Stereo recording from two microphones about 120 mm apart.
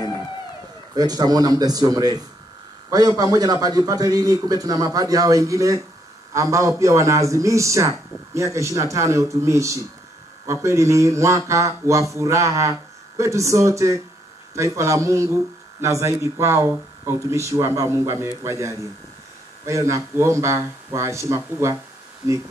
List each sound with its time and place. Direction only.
0.9 s a man's voice: 35° right (ahead or behind)